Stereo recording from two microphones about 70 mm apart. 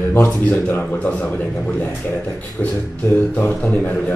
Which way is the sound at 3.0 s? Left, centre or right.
Left.